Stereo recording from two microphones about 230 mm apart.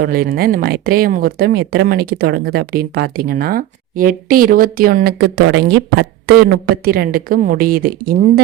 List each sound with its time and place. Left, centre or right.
0.0 s speech: right